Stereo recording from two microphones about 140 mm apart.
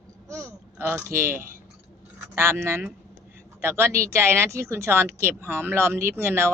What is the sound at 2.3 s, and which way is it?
A woman's voice, 20° right (ahead or behind).